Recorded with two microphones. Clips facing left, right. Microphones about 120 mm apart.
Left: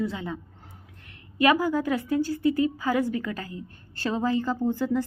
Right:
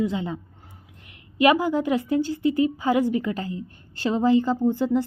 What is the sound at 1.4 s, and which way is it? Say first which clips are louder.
A woman's voice: right 3 dB; 20° right (ahead or behind).